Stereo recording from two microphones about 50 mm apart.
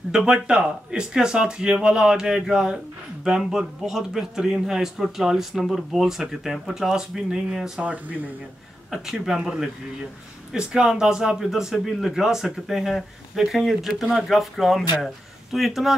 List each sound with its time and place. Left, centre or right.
0.1 s speech: centre
7.8 s speech: right
8.9 s speech: centre